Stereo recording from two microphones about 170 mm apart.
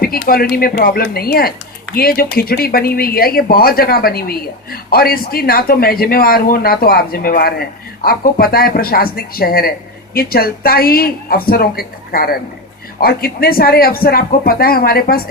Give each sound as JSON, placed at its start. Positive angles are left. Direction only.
{"t": 0.0, "sound": "speech", "side_deg": 60}